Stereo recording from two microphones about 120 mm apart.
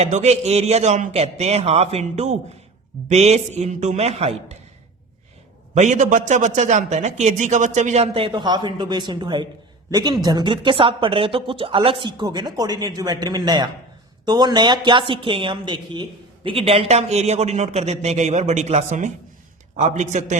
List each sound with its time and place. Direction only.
0.0 s speech: 65° right (ahead or behind)
5.7 s a man's voice: 80° right